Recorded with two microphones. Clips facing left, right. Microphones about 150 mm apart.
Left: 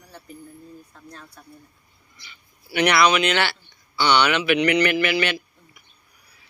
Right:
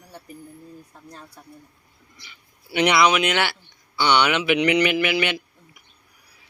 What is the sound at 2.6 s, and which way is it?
Speech, 20° right (ahead or behind).